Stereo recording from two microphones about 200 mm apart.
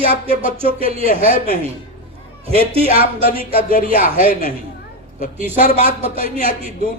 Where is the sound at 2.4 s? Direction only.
30° right (ahead or behind).